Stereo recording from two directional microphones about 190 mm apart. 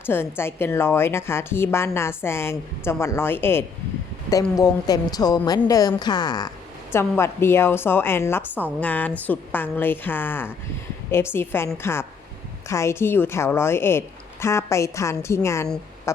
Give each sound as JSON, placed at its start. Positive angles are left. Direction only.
{"t": 0.0, "sound": "a woman's voice", "side_deg": 10}